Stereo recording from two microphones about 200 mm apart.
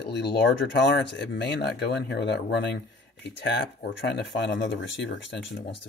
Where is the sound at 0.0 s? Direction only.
55° left (ahead or behind).